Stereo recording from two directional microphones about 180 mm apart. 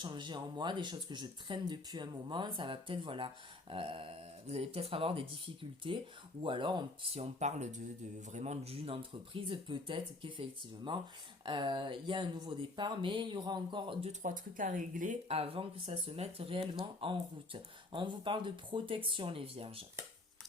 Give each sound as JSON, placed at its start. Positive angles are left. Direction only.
{"t": 0.0, "sound": "speech", "side_deg": -25}
{"t": 14.1, "sound": "speech", "side_deg": -45}